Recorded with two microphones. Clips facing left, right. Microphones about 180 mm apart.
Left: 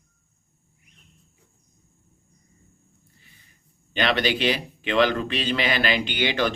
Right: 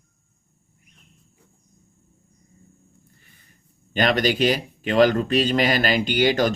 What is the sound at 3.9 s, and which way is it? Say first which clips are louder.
A man's voice: right 3 dB; 45° right (ahead or behind).